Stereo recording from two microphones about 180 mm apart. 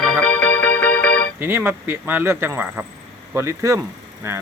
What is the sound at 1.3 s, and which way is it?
Speech, 10° right (ahead or behind).